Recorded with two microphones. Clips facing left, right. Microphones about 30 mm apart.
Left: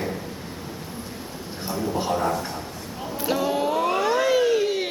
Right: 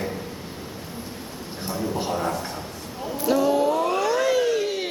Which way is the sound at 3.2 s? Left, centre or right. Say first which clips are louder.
Right 3 dB; centre.